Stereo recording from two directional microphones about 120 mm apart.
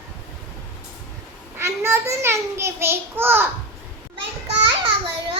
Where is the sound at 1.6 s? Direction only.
20° right (ahead or behind).